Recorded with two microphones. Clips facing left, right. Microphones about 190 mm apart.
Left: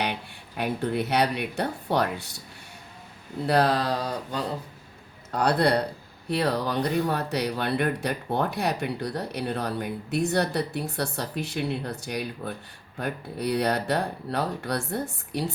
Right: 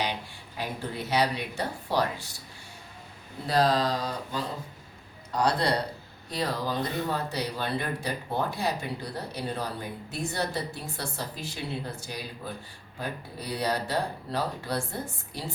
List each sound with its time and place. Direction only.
0.0 s speech: 65° left (ahead or behind)
3.4 s speech: 65° left (ahead or behind)